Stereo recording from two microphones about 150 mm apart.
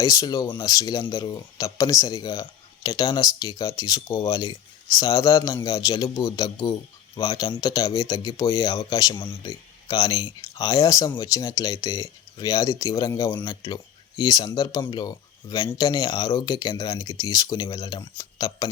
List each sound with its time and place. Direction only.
0.0 s speech: 25° left (ahead or behind)